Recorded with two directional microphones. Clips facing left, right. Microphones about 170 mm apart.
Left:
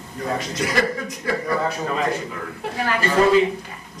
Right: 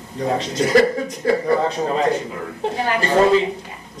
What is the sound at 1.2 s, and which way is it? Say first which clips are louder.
Speech: right 5 dB; 30° right (ahead or behind).